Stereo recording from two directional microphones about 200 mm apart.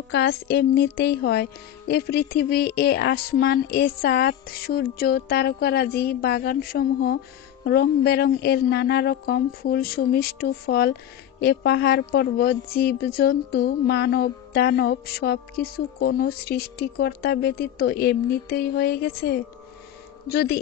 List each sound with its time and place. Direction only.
0.1 s a woman's voice: 60° left (ahead or behind)